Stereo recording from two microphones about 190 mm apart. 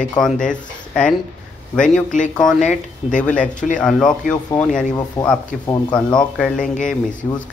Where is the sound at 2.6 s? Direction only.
40° left (ahead or behind).